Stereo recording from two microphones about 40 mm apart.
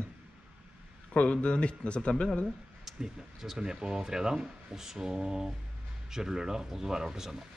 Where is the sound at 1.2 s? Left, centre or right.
Left.